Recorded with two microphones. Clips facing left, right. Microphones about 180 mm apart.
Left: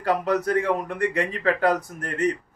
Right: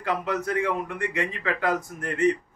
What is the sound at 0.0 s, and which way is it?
Speech, 35° left (ahead or behind).